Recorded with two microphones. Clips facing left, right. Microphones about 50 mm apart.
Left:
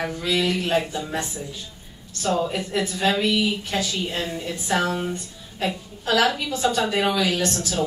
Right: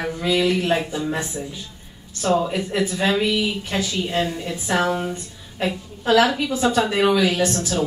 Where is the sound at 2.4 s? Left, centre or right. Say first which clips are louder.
Right 2 dB; centre.